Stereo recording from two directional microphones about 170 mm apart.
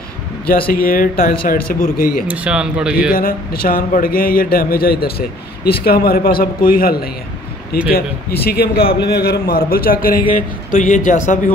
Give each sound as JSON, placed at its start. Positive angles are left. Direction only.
{"t": 0.7, "sound": "a man's voice", "side_deg": 55}
{"t": 2.2, "sound": "speech", "side_deg": -10}
{"t": 3.1, "sound": "a man's voice", "side_deg": 55}